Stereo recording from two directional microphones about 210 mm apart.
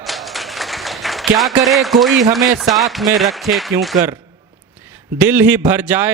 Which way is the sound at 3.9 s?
20° right (ahead or behind).